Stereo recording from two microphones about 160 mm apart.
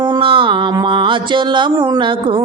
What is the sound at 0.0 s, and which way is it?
Mantra, 30° right (ahead or behind).